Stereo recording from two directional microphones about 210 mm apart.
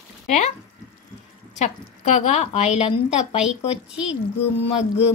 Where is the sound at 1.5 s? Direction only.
30° left (ahead or behind).